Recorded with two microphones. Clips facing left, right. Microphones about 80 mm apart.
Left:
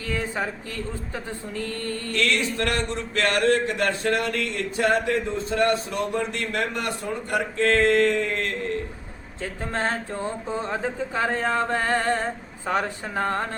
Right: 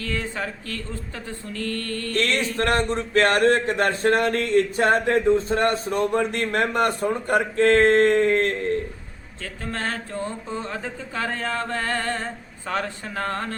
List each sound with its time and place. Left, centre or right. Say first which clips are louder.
0.0 s speech: left 1 dB; centre
2.1 s a man's voice: right 1 dB; right
9.4 s speech: left 3 dB; centre